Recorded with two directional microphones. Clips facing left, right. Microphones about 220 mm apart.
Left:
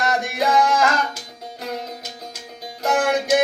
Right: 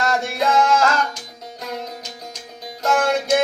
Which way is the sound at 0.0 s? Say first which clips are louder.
Right 1 dB; 15° left (ahead or behind).